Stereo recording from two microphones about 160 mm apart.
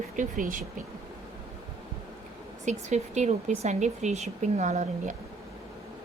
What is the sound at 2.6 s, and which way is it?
A woman's voice, 45° right (ahead or behind).